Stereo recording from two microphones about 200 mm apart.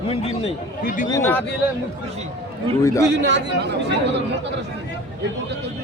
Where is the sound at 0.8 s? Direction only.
45° left (ahead or behind).